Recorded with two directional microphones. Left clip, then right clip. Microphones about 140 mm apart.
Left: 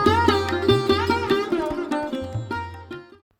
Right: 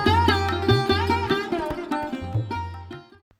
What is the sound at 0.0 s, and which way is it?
Sitar, centre (ahead or behind).